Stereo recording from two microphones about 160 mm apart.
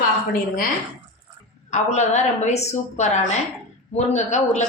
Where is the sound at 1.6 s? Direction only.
45° left (ahead or behind).